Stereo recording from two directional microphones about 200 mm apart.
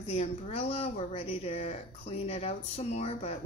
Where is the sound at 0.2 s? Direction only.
30° left (ahead or behind).